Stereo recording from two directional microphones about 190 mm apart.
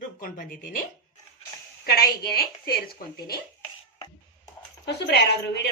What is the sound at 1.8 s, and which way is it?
Speech, 55° left (ahead or behind).